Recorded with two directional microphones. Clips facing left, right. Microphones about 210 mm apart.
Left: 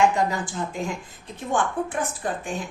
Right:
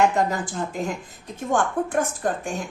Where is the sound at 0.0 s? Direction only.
40° right (ahead or behind).